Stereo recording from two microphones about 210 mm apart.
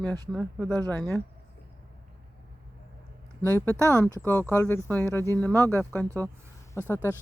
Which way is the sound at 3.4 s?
10° left (ahead or behind).